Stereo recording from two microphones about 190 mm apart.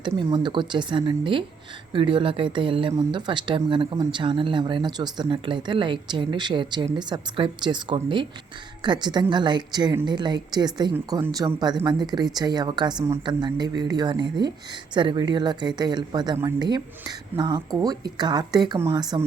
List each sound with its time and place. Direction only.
0.0 s a woman's voice: 25° right (ahead or behind)